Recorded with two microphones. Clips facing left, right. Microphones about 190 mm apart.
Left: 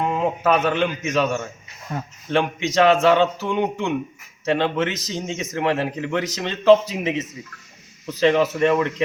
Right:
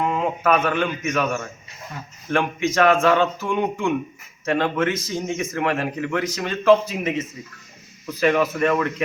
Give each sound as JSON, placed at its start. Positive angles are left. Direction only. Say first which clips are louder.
{"t": 0.0, "sound": "speech", "louder": "left 1 dB", "side_deg": 20}